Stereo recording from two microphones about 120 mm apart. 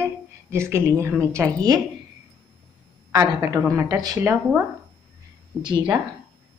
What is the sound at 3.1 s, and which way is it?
A woman's voice, 30° right (ahead or behind).